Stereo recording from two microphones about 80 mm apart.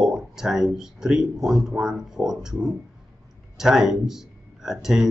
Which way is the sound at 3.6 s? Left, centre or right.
Centre.